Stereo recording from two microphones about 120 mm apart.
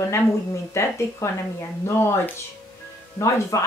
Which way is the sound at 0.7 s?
25° left (ahead or behind).